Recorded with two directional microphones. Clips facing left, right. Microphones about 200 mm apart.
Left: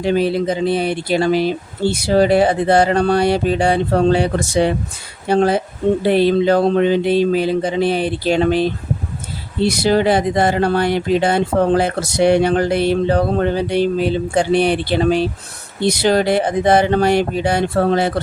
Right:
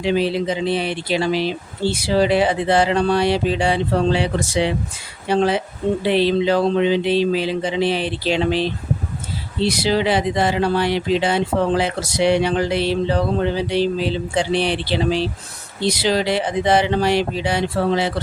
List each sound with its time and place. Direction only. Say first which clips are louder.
0.0 s speech: left 3 dB; 50° left (ahead or behind)